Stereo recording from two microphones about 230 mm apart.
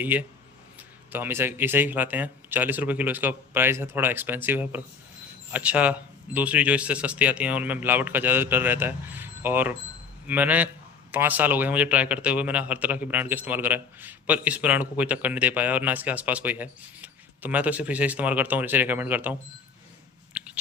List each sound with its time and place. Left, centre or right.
0.0 s speech: centre